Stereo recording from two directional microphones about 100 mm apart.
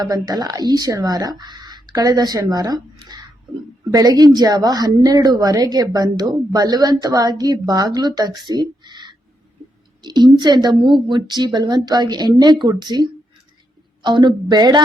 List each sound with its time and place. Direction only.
0.0 s speech: 40° right (ahead or behind)
8.8 s a sound: 50° right (ahead or behind)
10.0 s a woman's voice: 45° right (ahead or behind)